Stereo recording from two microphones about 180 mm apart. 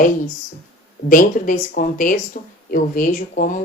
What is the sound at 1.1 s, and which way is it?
Speech, 50° left (ahead or behind).